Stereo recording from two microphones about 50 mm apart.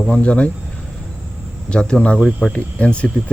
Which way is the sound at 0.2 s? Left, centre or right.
Left.